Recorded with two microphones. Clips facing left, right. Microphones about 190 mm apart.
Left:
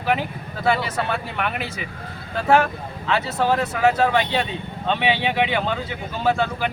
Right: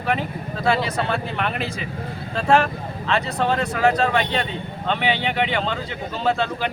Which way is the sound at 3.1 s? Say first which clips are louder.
Left 1 dB; 5° left (ahead or behind).